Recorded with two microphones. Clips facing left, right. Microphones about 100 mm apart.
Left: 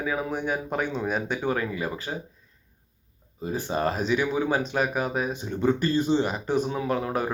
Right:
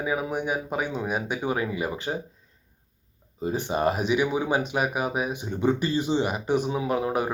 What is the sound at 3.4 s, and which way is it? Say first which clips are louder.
Speech: right 2 dB; 20° right (ahead or behind).